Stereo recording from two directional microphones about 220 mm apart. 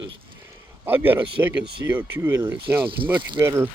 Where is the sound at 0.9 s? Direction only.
10° right (ahead or behind).